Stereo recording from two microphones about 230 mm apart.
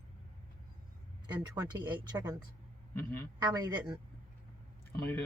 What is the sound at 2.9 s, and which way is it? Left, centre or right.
Speech, centre.